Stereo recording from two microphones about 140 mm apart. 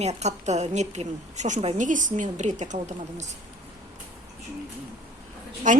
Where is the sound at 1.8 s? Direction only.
65° right (ahead or behind).